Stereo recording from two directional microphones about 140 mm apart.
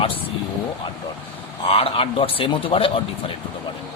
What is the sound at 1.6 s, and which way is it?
Speech, 45° left (ahead or behind).